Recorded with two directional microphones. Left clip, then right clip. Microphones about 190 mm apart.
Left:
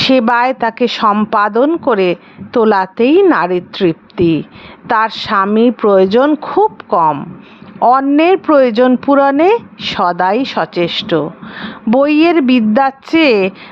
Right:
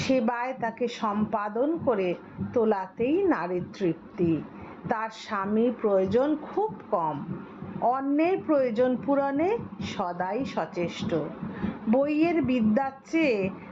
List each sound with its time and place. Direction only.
0.1 s a woman's voice: 40° left (ahead or behind)